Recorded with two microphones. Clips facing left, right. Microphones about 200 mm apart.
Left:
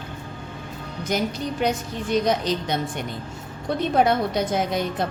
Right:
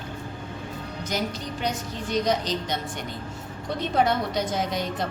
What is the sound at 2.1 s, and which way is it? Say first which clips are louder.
Speech: left 3 dB; 55° left (ahead or behind).